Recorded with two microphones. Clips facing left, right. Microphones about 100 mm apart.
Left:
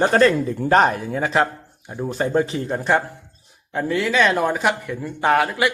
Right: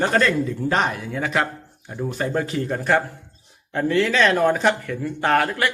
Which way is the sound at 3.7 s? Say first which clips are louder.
Right 1 dB; 10° left (ahead or behind).